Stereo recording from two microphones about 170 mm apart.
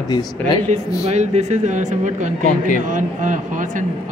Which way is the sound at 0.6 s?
40° right (ahead or behind).